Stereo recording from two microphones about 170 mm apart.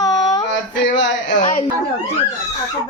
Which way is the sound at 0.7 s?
90° left.